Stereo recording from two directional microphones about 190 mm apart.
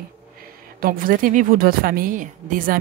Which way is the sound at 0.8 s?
45° right (ahead or behind).